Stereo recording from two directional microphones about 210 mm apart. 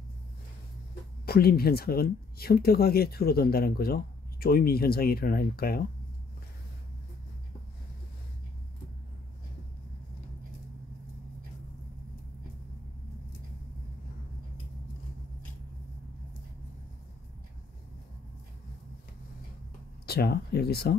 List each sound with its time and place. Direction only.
1.2 s speech: 45° left (ahead or behind)
20.1 s speech: 50° left (ahead or behind)